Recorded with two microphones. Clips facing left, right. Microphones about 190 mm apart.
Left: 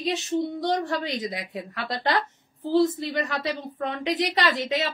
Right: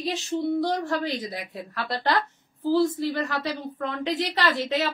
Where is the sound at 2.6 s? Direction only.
20° left (ahead or behind).